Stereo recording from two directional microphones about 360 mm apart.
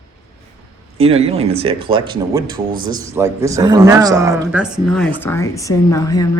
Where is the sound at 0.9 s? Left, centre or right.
Centre.